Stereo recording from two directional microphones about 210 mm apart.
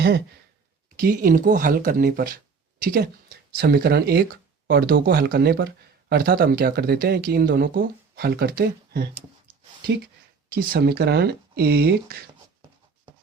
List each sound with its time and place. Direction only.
1.0 s speech: 40° right (ahead or behind)
10.5 s speech: 50° right (ahead or behind)